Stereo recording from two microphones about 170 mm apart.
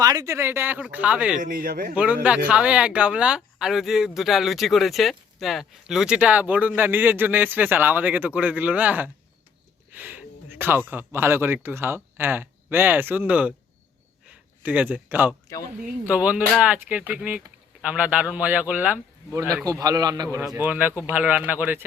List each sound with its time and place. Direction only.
0.0 s speech: 20° right (ahead or behind)
1.4 s speech: 50° right (ahead or behind)
2.5 s a man's voice: 5° right (ahead or behind)